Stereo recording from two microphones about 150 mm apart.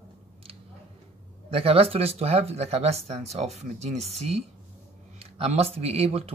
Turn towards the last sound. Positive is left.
turn(degrees=-45)  # may be behind; listen again after turning